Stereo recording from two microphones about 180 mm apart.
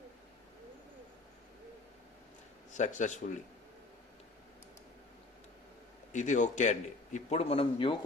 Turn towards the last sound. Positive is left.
turn(degrees=30)  # may be behind; listen again after turning